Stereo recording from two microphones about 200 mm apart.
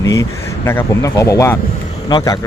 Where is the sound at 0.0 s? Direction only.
15° left (ahead or behind).